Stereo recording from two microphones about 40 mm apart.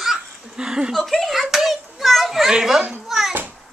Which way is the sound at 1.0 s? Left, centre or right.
Centre.